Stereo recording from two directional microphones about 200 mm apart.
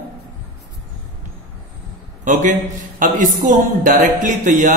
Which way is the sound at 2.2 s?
40° right (ahead or behind).